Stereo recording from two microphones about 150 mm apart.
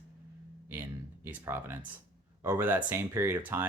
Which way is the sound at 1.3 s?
10° right (ahead or behind).